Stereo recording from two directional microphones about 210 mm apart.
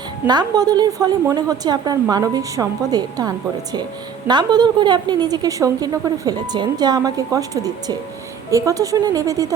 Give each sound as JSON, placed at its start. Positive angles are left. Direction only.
{"t": 0.3, "sound": "a woman's voice", "side_deg": -20}